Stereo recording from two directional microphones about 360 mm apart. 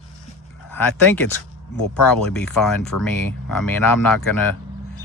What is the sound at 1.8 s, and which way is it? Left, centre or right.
Speech, left.